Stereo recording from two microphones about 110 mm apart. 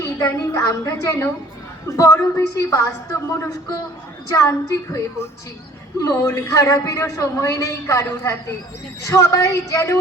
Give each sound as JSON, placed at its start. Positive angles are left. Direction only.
{"t": 0.2, "sound": "a man's voice", "side_deg": 25}